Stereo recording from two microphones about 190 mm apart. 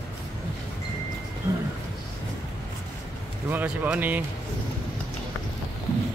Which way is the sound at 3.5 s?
10° right (ahead or behind).